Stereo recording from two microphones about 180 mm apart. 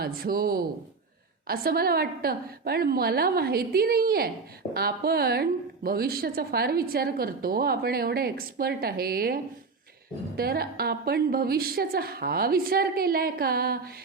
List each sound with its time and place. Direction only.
0.0 s a woman's voice: 55° right (ahead or behind)